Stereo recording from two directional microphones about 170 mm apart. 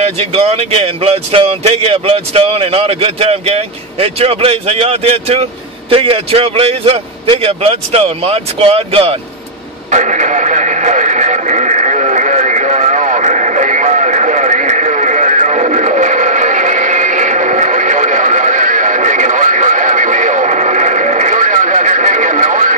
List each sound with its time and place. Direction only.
0.0 s speech: 35° right (ahead or behind)
9.8 s radio: 45° right (ahead or behind)